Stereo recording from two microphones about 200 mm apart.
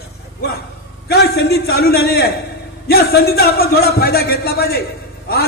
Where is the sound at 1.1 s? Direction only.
55° left (ahead or behind).